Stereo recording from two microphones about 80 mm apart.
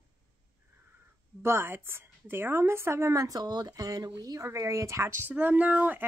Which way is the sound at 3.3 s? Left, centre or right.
Right.